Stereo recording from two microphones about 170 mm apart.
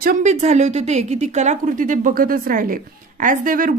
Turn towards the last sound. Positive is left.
turn(degrees=-55)  # may be behind; listen again after turning